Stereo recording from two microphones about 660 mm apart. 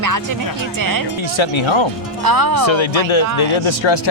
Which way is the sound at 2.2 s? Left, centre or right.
Right.